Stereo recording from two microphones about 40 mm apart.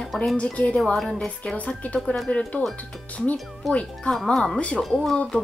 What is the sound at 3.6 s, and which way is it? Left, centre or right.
A woman's voice, centre.